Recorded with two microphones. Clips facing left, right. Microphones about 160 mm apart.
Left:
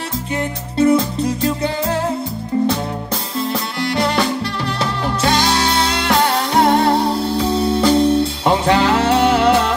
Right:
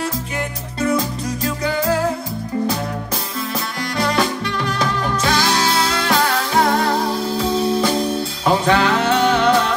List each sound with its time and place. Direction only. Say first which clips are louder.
0.7 s music: left 6 dB; 30° left (ahead or behind)
3.3 s music: left 5 dB; 30° left (ahead or behind)
7.3 s music: right 1 dB; centre (ahead or behind)
8.5 s music: even; 30° left (ahead or behind)